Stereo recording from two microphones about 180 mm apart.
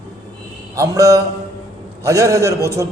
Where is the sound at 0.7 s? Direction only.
20° right (ahead or behind).